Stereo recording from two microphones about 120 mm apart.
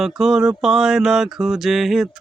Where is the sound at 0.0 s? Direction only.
Centre (ahead or behind).